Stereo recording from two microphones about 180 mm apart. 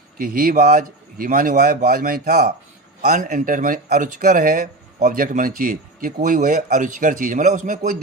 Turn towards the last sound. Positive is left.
turn(degrees=-45)  # may be behind; listen again after turning